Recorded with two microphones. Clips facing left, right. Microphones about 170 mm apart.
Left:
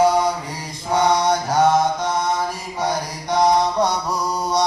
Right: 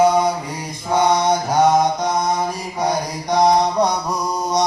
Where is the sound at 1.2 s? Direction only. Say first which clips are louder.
Right 1 dB; 10° right (ahead or behind).